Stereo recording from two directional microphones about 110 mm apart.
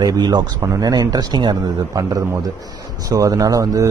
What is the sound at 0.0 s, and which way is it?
Speech, 40° right (ahead or behind).